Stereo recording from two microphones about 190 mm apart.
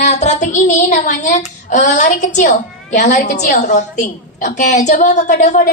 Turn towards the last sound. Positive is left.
turn(degrees=40)  # may be behind; listen again after turning